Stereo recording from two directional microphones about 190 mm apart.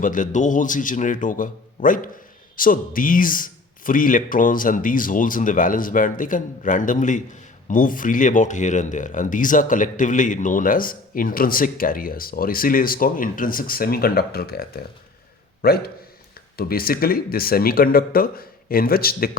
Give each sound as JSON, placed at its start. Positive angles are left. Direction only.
{"t": 0.0, "sound": "a man's voice", "side_deg": 45}